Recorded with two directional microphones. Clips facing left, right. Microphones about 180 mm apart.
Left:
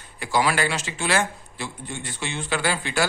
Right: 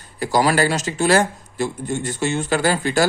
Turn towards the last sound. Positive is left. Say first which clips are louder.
# right 6 dB
turn(degrees=-40)  # may be behind; listen again after turning